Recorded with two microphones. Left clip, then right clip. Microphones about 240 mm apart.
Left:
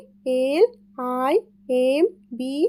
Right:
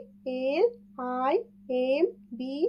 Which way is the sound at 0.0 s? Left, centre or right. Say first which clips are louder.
Left 8 dB; left.